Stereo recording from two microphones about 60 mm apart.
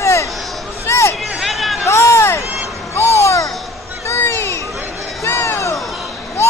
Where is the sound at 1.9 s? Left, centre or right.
Left.